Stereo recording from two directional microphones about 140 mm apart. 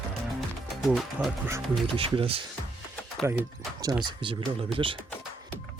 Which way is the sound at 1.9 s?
40° right (ahead or behind).